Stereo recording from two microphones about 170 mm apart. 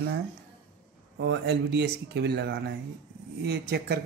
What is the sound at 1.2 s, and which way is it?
Speech, 90° right.